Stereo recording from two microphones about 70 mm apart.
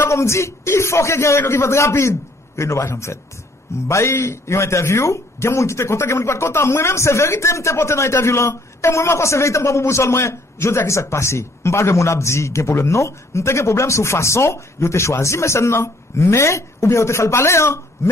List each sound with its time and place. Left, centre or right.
0.1 s a man's voice: left